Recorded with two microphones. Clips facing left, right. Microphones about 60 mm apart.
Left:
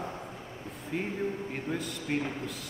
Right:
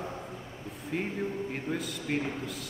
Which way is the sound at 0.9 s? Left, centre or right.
Centre.